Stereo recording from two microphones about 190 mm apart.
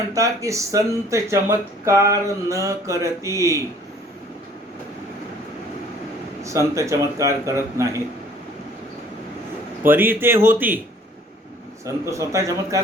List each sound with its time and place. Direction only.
0.1 s speech: 15° right (ahead or behind)
6.4 s speech: 15° right (ahead or behind)
9.8 s speech: 10° right (ahead or behind)
12.1 s speech: 15° right (ahead or behind)